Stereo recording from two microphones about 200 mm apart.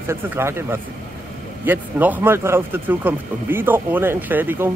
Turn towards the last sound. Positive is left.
turn(degrees=-10)  # may be behind; listen again after turning